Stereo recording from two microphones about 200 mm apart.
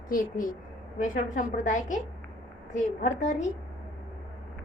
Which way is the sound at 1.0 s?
40° left (ahead or behind).